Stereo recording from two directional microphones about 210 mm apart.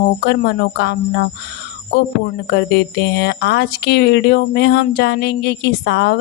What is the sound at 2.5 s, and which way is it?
Speech, 50° left (ahead or behind).